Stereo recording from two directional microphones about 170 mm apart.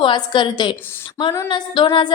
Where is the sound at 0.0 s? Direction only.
30° left (ahead or behind).